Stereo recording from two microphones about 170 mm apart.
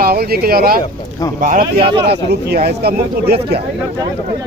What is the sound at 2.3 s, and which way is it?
Speech, 70° right (ahead or behind).